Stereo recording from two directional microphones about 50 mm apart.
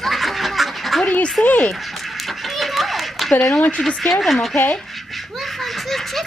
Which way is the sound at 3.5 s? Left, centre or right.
Left.